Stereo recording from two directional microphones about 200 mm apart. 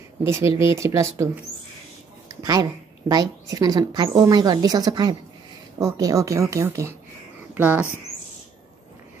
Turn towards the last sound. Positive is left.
turn(degrees=-5)  # may be behind; listen again after turning